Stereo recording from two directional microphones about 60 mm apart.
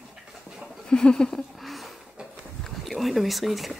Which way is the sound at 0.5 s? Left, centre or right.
Centre.